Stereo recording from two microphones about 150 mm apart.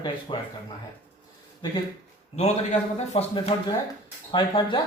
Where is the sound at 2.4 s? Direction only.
45° left (ahead or behind).